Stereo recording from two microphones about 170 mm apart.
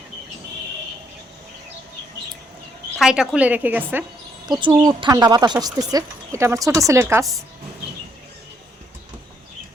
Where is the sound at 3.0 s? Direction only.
5° right (ahead or behind).